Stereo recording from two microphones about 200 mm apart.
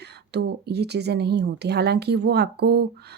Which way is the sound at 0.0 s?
55° right (ahead or behind).